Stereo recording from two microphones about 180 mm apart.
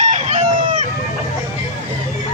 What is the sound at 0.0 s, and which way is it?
Chicken, 40° right (ahead or behind).